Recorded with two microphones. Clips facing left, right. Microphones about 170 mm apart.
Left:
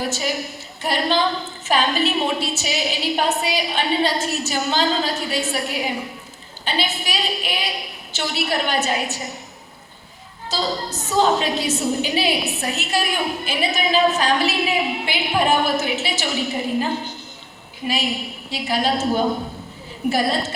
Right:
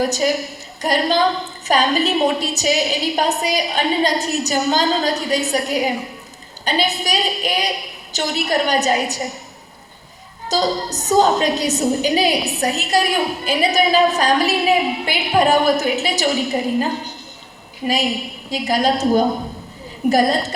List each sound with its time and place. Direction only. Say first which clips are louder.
0.0 s a woman's voice: right 6 dB; 40° right (ahead or behind)
10.5 s a woman's voice: right 5 dB; 40° right (ahead or behind)